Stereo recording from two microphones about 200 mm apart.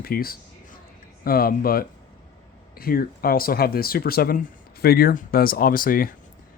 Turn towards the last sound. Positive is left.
turn(degrees=45)  # may be behind; listen again after turning